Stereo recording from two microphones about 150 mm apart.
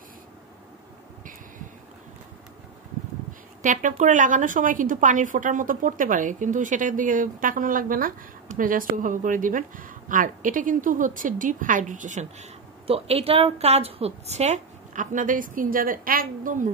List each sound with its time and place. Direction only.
3.6 s a woman's voice: 55° right (ahead or behind)